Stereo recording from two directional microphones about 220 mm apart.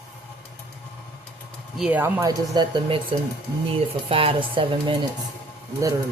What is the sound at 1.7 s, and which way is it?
A woman's voice, 5° right (ahead or behind).